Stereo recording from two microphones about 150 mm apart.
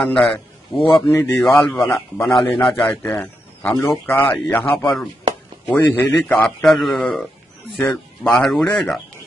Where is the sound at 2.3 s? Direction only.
5° left (ahead or behind).